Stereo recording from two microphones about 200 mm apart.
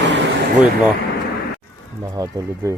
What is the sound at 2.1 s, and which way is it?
Speech, 15° right (ahead or behind).